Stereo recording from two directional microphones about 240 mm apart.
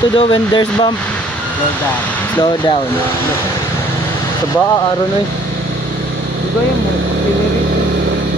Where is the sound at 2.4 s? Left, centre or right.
Centre.